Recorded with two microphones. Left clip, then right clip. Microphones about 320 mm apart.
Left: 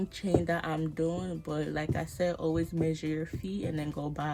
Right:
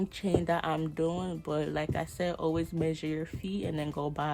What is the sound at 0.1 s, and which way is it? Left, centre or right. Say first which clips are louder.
Speech: left 1 dB; centre.